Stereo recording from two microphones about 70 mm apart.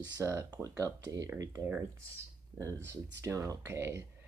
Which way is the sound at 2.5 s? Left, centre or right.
Right.